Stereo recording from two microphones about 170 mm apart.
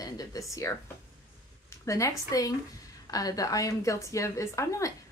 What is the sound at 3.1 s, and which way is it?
A woman's voice, 20° left (ahead or behind).